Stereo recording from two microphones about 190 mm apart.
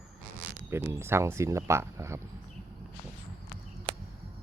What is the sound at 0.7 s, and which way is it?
Speech, 15° right (ahead or behind).